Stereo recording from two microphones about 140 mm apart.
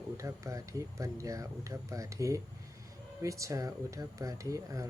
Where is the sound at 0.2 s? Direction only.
20° right (ahead or behind).